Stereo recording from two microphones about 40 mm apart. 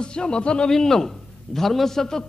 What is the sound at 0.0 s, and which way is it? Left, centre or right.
Speech, left.